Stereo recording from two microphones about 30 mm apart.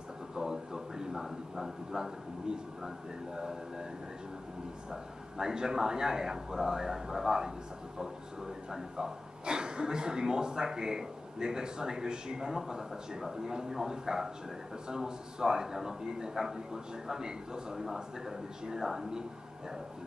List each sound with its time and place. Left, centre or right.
0.4 s a sound: centre
5.4 s speech: right
8.7 s a woman's voice: right